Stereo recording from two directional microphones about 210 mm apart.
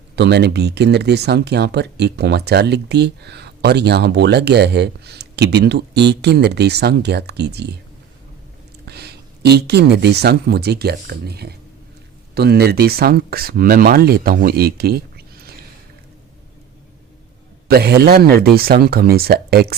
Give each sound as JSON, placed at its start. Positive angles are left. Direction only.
{"t": 0.2, "sound": "speech", "side_deg": -50}
{"t": 8.9, "sound": "speech", "side_deg": -50}
{"t": 17.7, "sound": "speech", "side_deg": -50}